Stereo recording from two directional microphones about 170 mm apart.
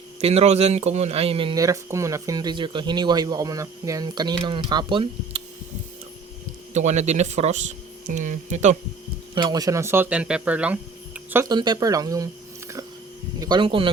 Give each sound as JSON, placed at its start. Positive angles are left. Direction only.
{"t": 0.2, "sound": "a man's voice", "side_deg": -35}
{"t": 1.5, "sound": "speech", "side_deg": -20}
{"t": 6.7, "sound": "speech", "side_deg": -40}
{"t": 9.3, "sound": "speech", "side_deg": -25}
{"t": 11.4, "sound": "speech", "side_deg": -25}